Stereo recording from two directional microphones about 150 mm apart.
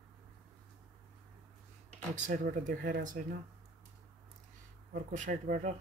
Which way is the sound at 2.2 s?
60° right (ahead or behind).